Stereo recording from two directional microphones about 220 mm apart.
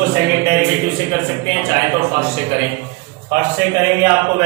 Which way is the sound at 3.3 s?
10° right (ahead or behind).